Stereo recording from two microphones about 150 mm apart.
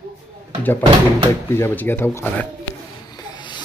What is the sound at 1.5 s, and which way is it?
Speech, 15° left (ahead or behind).